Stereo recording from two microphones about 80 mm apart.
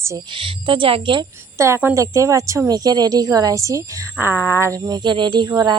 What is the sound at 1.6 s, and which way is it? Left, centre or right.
A woman's voice, right.